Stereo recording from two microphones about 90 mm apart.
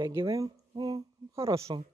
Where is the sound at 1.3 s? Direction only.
35° right (ahead or behind).